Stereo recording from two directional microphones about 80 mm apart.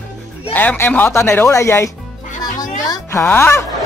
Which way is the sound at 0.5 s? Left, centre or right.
Left.